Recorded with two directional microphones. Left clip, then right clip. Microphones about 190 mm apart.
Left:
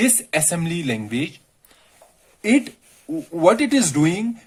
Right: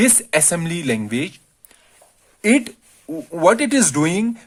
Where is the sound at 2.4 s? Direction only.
50° right (ahead or behind).